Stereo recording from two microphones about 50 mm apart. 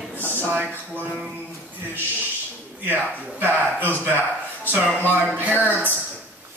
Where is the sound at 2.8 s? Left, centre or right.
Right.